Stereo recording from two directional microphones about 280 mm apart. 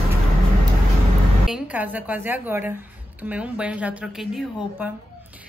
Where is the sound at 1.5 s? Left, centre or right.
Centre.